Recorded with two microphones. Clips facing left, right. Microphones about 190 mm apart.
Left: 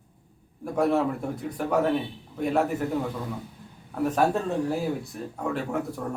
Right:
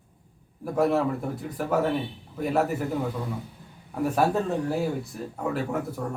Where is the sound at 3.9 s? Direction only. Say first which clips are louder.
Even; 10° right (ahead or behind).